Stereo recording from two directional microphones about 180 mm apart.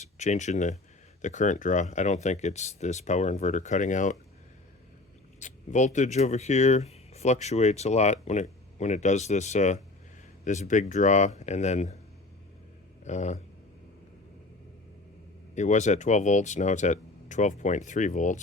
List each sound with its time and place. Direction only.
0.0 s speech: 40° left (ahead or behind)
5.4 s speech: 40° left (ahead or behind)
13.1 s speech: 40° left (ahead or behind)
15.5 s speech: 40° left (ahead or behind)